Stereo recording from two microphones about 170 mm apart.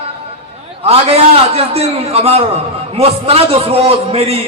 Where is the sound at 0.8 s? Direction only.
35° right (ahead or behind).